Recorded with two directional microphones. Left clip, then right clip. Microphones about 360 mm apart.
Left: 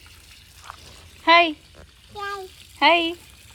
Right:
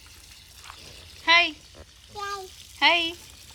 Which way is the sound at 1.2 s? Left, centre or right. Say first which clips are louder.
Left 4 dB; centre.